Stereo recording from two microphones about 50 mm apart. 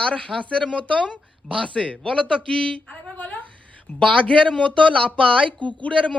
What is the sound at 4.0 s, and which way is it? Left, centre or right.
Speech, left.